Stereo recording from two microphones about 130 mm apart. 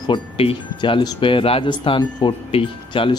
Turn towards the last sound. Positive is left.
turn(degrees=45)  # may be behind; listen again after turning